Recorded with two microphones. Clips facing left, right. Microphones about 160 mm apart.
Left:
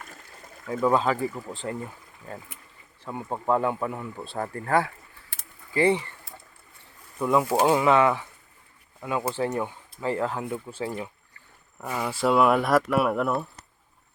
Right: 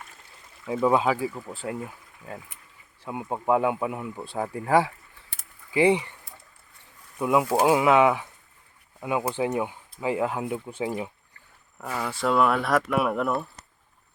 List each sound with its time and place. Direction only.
0.0 s a sound: 45° left (ahead or behind)
0.8 s speech: 15° right (ahead or behind)
7.2 s speech: 5° right (ahead or behind)
11.8 s speech: 5° left (ahead or behind)